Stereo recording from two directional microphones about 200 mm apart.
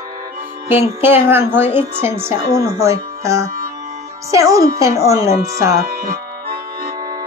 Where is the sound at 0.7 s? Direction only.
10° right (ahead or behind).